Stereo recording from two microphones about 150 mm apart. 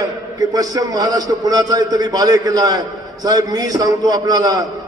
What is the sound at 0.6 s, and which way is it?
A man's voice, 25° right (ahead or behind).